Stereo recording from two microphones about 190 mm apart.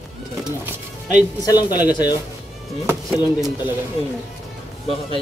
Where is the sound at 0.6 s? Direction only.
5° right (ahead or behind).